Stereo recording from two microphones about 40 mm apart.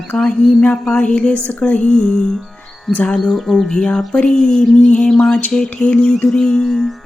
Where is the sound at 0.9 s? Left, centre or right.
Left.